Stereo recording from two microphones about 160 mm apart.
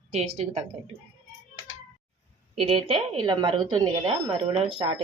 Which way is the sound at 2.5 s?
35° right (ahead or behind).